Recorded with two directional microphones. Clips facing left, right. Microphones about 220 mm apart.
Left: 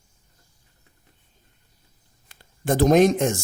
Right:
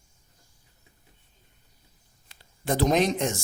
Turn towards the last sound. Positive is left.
turn(degrees=50)  # may be behind; listen again after turning